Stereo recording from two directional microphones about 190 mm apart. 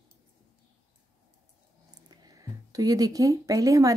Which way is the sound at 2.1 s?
20° right (ahead or behind).